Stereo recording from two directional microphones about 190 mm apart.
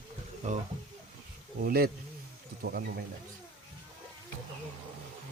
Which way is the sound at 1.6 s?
55° right (ahead or behind).